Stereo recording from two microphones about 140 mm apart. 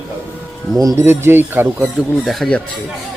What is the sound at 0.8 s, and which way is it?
Speech, 20° right (ahead or behind).